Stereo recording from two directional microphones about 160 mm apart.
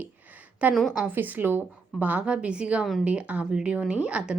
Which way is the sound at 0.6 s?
Centre (ahead or behind).